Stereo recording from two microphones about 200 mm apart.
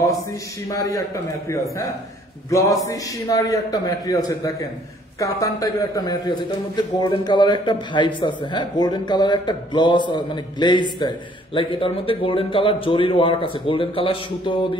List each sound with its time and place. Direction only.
0.7 s a man's voice: 15° left (ahead or behind)
2.8 s speech: 15° left (ahead or behind)